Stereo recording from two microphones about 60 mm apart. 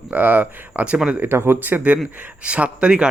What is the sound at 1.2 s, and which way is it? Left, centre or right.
Speech, right.